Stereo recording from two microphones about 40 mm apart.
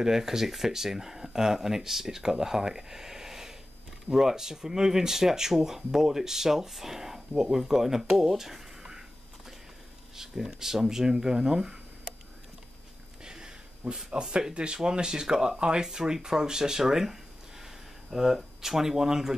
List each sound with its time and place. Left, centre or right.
0.0 s speech: centre
10.1 s speech: centre
13.2 s a sound: centre
14.1 s speech: right